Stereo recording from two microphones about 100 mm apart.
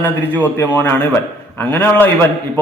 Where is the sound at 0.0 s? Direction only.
15° left (ahead or behind).